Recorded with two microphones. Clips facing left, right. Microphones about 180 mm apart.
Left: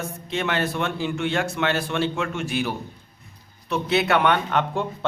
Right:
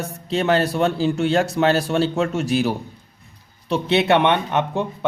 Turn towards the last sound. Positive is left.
turn(degrees=-20)  # may be behind; listen again after turning